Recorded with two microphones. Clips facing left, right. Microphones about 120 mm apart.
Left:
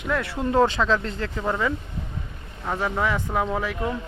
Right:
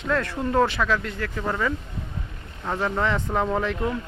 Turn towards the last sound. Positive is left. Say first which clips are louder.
# right 2 dB
turn(degrees=5)  # may be behind; listen again after turning